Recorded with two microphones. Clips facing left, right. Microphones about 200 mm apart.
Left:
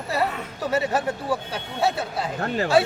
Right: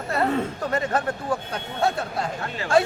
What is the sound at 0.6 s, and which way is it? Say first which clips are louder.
Speech: left 1 dB; 5° left (ahead or behind).